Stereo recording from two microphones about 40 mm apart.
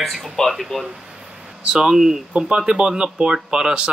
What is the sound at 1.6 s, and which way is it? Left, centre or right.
Speech, centre.